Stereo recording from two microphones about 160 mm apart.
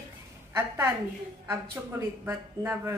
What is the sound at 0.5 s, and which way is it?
Speech, 15° right (ahead or behind).